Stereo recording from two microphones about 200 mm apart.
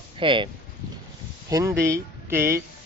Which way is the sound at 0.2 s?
25° right (ahead or behind).